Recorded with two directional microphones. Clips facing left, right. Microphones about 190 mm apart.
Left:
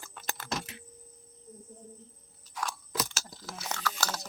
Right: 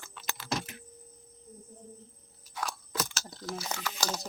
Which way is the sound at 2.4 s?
5° right (ahead or behind).